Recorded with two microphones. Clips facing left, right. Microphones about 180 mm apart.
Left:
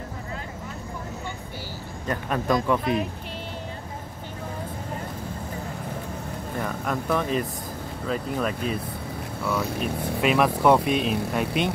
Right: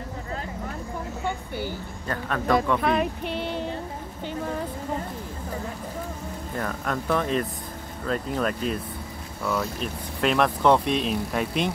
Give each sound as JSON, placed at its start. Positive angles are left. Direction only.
{"t": 2.0, "sound": "a man's voice", "side_deg": 15}
{"t": 2.8, "sound": "speech", "side_deg": -65}
{"t": 6.6, "sound": "speech", "side_deg": 0}